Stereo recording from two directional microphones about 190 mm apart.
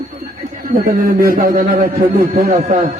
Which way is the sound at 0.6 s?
50° right (ahead or behind).